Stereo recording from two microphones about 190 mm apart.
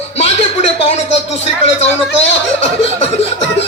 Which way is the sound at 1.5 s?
35° left (ahead or behind).